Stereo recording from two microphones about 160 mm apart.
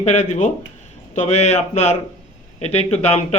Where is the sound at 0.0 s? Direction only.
45° left (ahead or behind).